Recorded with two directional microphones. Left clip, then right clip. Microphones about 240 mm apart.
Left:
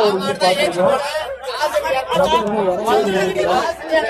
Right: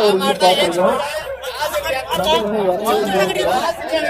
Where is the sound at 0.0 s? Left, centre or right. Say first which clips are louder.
Right 2 dB; centre.